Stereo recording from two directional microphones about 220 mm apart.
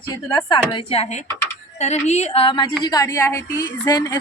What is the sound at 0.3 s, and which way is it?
A woman's voice, 20° left (ahead or behind).